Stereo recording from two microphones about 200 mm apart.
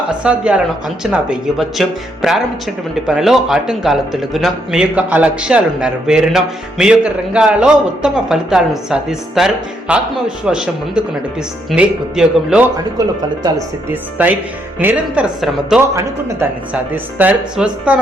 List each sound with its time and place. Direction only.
0.1 s speech: 5° right (ahead or behind)
12.7 s speech: 20° right (ahead or behind)
16.9 s speech: 10° right (ahead or behind)